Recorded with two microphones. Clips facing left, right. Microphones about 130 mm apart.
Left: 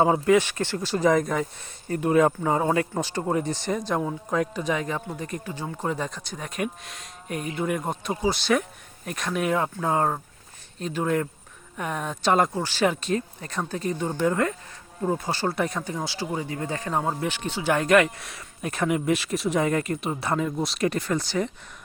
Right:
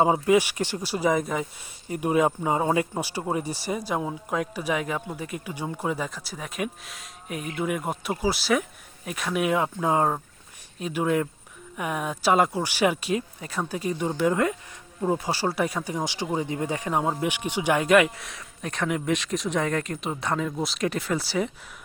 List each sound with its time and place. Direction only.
0.0 s speech: 15° right (ahead or behind)